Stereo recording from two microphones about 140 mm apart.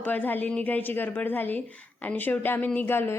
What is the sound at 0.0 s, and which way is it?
A woman's voice, 15° left (ahead or behind).